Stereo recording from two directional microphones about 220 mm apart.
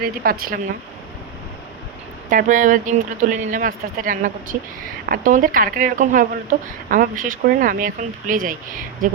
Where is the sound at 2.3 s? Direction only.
35° right (ahead or behind).